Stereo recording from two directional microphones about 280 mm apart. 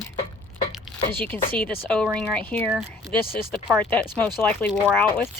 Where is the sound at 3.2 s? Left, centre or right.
Left.